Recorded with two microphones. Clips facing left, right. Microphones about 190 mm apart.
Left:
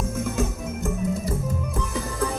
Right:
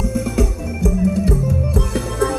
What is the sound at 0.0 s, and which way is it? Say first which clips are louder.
Music: right 7 dB; 80° right.